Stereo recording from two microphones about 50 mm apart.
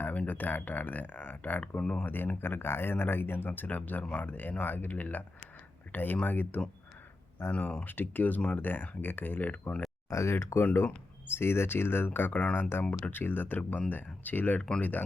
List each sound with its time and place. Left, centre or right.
0.3 s speech: left
1.8 s speech: left
2.0 s speech: left
7.6 s speech: left
10.1 s speech: left
11.3 s speech: left
12.5 s speech: left
13.6 s speech: left